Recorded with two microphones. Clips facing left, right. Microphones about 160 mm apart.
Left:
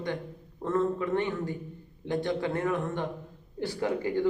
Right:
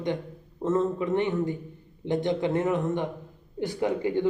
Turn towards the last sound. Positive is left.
turn(degrees=-20)  # may be behind; listen again after turning